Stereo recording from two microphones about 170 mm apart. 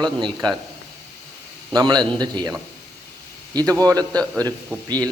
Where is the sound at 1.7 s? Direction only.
25° right (ahead or behind).